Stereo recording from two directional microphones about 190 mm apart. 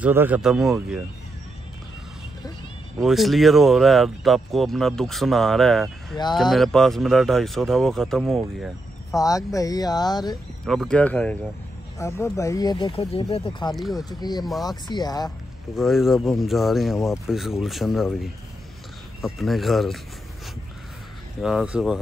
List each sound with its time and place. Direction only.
0.0 s speech: 10° right (ahead or behind)
3.0 s speech: centre (ahead or behind)
9.1 s speech: 20° left (ahead or behind)
10.6 s speech: centre (ahead or behind); by 13.7 s 25° left (ahead or behind)
13.7 s speech: centre (ahead or behind)
13.9 s speech: 20° left (ahead or behind)
14.4 s speech: centre (ahead or behind)
14.7 s speech: 20° left (ahead or behind)
15.2 s speech: centre (ahead or behind)
21.4 s speech: 5° right (ahead or behind)